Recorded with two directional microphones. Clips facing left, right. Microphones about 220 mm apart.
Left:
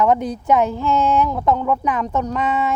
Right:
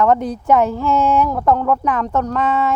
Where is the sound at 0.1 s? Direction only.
Centre (ahead or behind).